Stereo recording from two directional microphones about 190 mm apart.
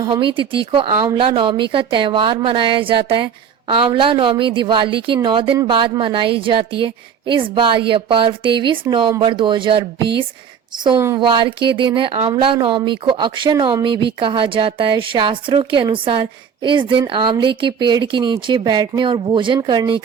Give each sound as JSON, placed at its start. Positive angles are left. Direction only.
{"t": 0.0, "sound": "speech", "side_deg": -25}